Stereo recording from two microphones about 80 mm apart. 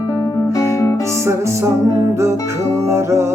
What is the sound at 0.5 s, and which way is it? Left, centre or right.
Music, left.